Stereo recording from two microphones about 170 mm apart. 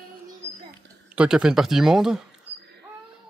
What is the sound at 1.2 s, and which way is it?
Speech, 5° right (ahead or behind).